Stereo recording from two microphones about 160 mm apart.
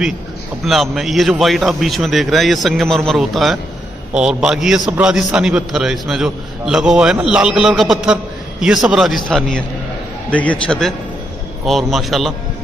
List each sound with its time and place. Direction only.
0.7 s a man's voice: centre (ahead or behind)